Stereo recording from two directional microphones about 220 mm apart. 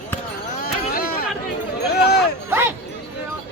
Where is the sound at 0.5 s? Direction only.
40° left (ahead or behind).